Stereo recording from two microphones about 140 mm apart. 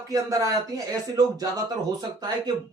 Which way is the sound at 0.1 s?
25° right (ahead or behind).